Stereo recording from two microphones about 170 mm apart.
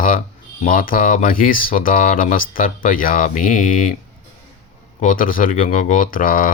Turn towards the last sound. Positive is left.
turn(degrees=55)  # may be behind; listen again after turning